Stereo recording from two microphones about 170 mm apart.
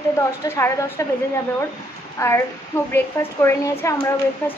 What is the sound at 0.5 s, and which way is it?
Speech, 15° left (ahead or behind).